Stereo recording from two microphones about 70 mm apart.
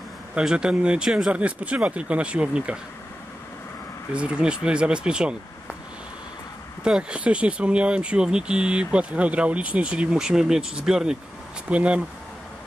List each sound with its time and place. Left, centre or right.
0.3 s speech: centre
4.1 s speech: centre
6.8 s speech: centre